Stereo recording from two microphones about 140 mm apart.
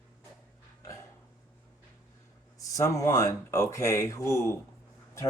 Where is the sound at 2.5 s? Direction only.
25° left (ahead or behind).